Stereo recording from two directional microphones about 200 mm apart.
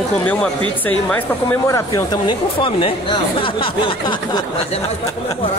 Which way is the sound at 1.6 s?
15° left (ahead or behind).